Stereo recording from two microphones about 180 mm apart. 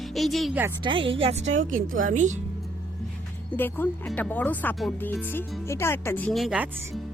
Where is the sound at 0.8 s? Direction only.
30° right (ahead or behind); by 2.4 s 45° right (ahead or behind).